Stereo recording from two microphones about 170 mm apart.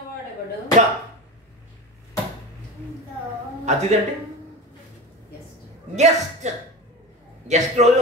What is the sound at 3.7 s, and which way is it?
Speech, 40° right (ahead or behind).